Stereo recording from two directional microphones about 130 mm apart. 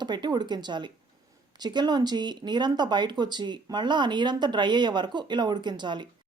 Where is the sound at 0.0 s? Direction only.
35° right (ahead or behind).